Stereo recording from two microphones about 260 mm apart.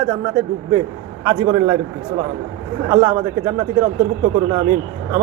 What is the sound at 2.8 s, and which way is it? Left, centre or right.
A man's voice, centre.